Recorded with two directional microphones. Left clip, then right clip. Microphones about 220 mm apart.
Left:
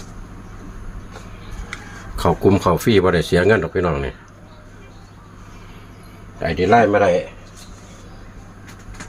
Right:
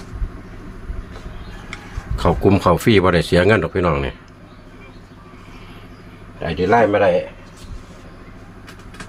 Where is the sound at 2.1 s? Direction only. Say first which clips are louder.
Even; centre (ahead or behind).